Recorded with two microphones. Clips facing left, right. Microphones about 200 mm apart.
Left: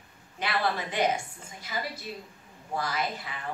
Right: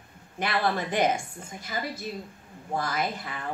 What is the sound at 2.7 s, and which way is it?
Speech, 50° right (ahead or behind).